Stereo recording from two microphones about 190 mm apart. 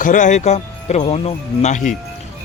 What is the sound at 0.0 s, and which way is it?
Speech, 40° left (ahead or behind).